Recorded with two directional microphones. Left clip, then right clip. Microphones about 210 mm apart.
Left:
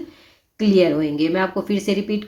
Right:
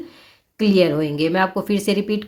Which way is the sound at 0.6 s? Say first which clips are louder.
Even; 35° right (ahead or behind).